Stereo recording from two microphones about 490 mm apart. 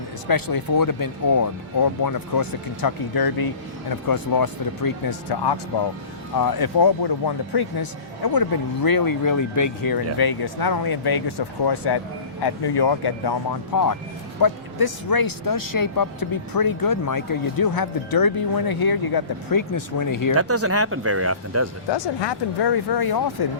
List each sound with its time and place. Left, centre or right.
0.3 s speech: left
20.3 s speech: right
21.8 s speech: left